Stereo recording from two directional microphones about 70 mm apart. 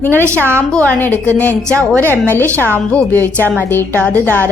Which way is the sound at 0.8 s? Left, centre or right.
Left.